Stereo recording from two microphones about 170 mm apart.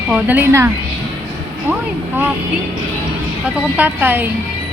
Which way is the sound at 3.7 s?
10° right (ahead or behind).